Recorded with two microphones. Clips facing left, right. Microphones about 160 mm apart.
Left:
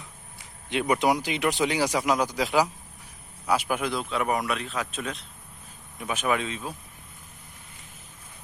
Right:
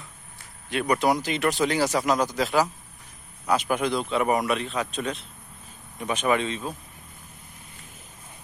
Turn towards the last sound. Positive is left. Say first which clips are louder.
# right 3 dB
turn(degrees=5)  # may be behind; listen again after turning